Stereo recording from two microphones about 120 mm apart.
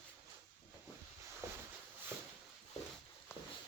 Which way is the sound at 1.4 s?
25° right (ahead or behind).